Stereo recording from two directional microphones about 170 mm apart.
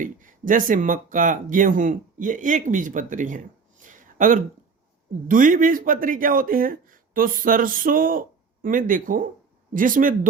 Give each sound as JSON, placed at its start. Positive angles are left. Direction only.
{"t": 0.0, "sound": "speech", "side_deg": -50}